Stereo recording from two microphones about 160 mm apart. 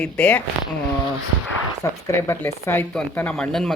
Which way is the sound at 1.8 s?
20° left (ahead or behind).